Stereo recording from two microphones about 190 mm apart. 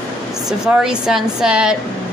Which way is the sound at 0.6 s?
5° right (ahead or behind).